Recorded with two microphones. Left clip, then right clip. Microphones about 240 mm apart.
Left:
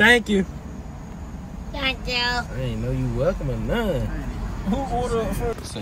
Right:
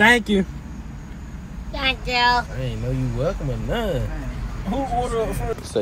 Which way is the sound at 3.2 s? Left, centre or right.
Centre.